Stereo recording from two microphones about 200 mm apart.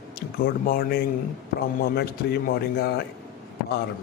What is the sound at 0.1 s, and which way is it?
A man's voice, 50° left (ahead or behind).